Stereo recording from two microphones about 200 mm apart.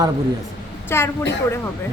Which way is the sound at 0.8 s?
10° left (ahead or behind).